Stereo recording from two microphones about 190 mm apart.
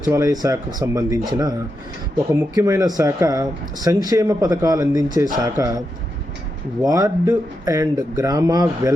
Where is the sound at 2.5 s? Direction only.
20° right (ahead or behind).